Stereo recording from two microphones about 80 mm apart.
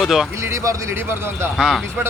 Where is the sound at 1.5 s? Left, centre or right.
Centre.